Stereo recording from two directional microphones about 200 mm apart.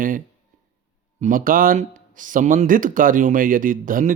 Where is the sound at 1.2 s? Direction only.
45° right (ahead or behind).